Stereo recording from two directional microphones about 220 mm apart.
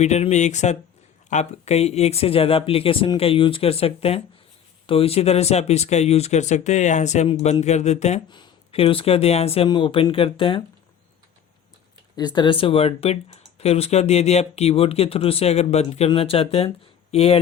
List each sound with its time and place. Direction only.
0.0 s speech: 30° left (ahead or behind)
12.1 s speech: 20° left (ahead or behind)